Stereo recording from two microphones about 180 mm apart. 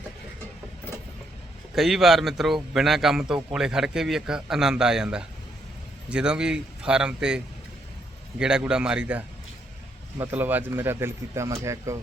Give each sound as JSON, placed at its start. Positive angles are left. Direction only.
{"t": 1.7, "sound": "a man's voice", "side_deg": 0}